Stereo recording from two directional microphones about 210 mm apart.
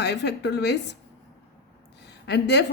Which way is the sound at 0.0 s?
55° left (ahead or behind).